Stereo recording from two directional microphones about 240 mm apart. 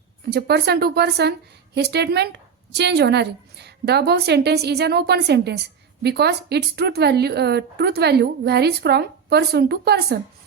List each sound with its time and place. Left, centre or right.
0.3 s speech: right